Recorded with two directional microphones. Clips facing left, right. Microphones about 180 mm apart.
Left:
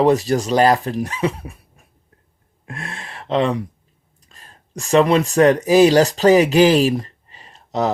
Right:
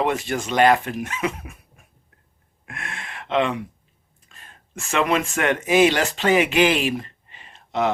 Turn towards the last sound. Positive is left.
turn(degrees=35)  # may be behind; listen again after turning